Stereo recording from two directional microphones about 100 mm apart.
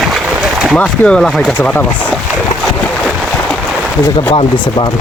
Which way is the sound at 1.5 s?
15° left (ahead or behind).